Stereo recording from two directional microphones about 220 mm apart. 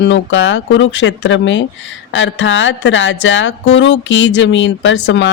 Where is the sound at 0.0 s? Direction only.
60° left (ahead or behind).